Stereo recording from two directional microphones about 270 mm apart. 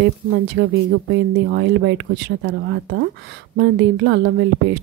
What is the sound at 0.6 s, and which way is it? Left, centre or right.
A woman's voice, right.